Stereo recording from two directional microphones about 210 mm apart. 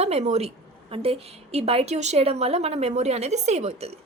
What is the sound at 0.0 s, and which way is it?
A woman's voice, 30° right (ahead or behind).